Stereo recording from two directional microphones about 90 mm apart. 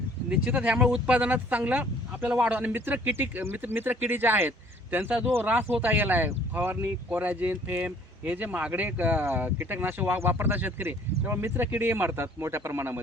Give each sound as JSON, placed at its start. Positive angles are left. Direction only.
{"t": 0.3, "sound": "speech", "side_deg": -10}